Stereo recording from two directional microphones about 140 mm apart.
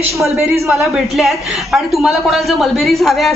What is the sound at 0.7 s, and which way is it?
A man's voice, centre (ahead or behind).